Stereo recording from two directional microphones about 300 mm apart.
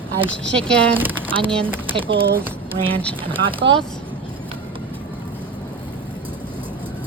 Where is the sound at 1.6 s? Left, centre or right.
Centre.